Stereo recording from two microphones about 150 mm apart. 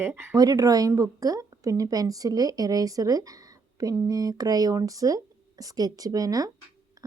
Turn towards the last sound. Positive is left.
turn(degrees=-25)  # may be behind; listen again after turning